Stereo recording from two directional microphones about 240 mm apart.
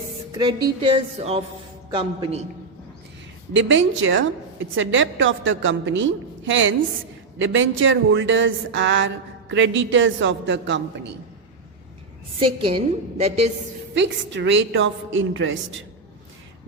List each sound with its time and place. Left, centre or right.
0.3 s a woman's voice: centre
3.7 s speech: right
12.4 s a woman's voice: right
13.9 s speech: right